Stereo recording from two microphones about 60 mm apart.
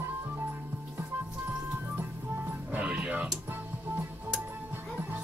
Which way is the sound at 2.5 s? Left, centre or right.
Right.